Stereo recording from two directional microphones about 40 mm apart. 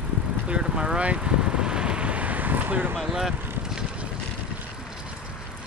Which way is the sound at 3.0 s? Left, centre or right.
Centre.